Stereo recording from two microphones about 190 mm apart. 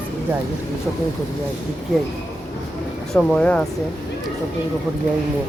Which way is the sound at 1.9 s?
Centre (ahead or behind).